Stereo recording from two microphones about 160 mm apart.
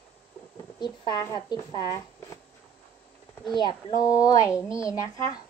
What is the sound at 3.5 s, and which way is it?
Speech, 30° left (ahead or behind).